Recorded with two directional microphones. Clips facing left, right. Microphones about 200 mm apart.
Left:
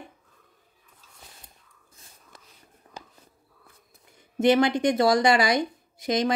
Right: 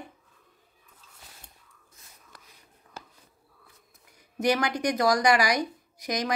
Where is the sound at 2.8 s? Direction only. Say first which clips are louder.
Left 1 dB; 35° left (ahead or behind).